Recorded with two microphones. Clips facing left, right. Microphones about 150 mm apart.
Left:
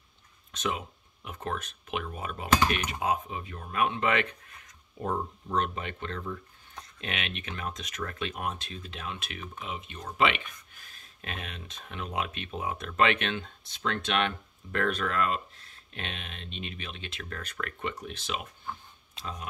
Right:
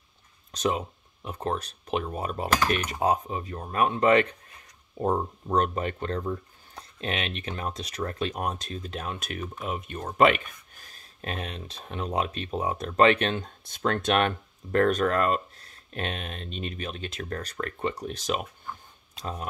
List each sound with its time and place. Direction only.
0.5 s speech: 35° right (ahead or behind)